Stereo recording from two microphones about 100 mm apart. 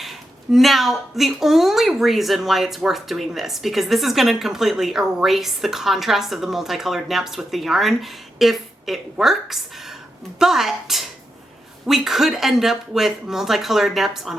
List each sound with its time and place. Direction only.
0.0 s a woman's voice: centre (ahead or behind)